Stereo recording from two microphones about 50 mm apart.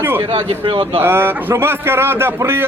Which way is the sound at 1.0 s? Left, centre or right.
Right.